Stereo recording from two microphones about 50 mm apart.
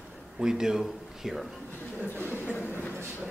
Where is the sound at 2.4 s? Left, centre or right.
Left.